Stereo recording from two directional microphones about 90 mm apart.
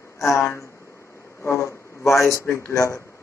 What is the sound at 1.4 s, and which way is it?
A man's voice, 30° left (ahead or behind).